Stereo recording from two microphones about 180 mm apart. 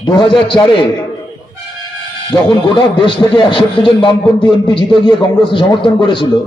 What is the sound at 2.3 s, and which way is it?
A man's voice, 25° left (ahead or behind).